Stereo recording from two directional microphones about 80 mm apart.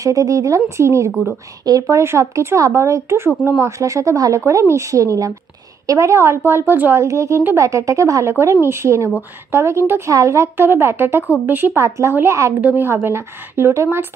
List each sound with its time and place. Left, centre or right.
0.0 s speech: right
12.6 s speech: right